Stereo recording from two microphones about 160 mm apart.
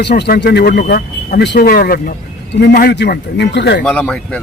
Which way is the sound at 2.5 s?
80° left.